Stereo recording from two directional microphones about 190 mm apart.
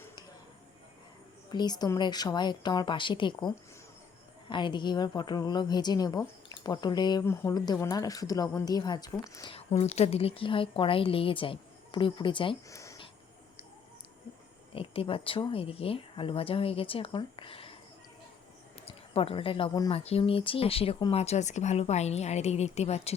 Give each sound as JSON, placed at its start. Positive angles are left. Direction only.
{"t": 1.5, "sound": "a woman's voice", "side_deg": 20}
{"t": 14.7, "sound": "a woman's voice", "side_deg": 30}
{"t": 18.9, "sound": "speech", "side_deg": 30}